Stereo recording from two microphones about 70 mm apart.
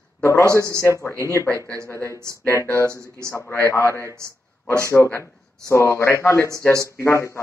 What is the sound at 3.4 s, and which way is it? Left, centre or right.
A man's voice, left.